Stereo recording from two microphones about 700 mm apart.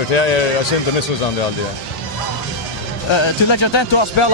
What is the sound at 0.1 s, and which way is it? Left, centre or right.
Speech, left.